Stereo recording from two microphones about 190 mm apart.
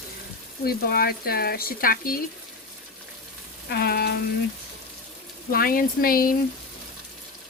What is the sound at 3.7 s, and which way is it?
Speech, 55° left (ahead or behind).